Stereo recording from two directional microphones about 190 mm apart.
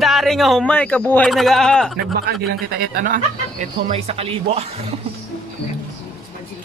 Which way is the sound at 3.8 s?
30° right (ahead or behind).